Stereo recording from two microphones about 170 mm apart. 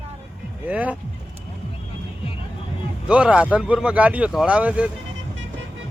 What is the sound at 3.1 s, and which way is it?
Speech, 5° right (ahead or behind).